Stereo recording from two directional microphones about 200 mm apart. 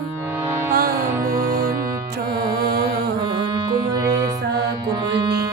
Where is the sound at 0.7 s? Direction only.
50° right (ahead or behind).